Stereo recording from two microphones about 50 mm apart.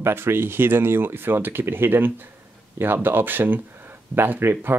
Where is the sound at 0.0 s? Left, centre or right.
Right.